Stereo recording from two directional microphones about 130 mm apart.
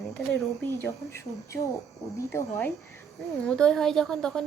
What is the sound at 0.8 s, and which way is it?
A woman's voice, 20° left (ahead or behind).